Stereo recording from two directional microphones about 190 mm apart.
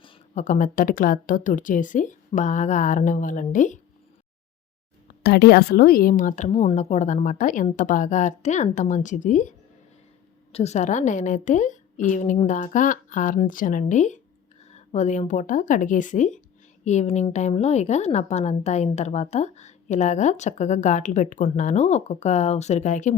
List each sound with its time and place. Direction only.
0.0 s a sound: 25° left (ahead or behind)
0.4 s a woman's voice: 40° left (ahead or behind)
5.2 s a woman's voice: 55° left (ahead or behind); by 9.5 s 40° left (ahead or behind)
10.5 s a woman's voice: 35° left (ahead or behind)